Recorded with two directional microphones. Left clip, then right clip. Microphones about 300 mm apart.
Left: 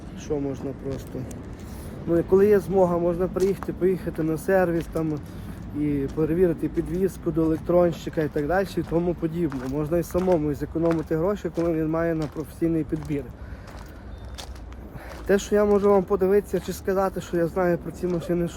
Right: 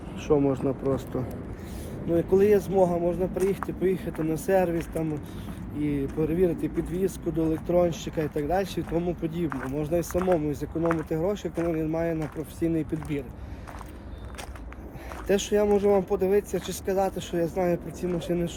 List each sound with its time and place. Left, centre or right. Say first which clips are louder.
0.4 s speech: right 5 dB; centre
2.1 s speech: left 2 dB; centre
15.3 s speech: left 3 dB; centre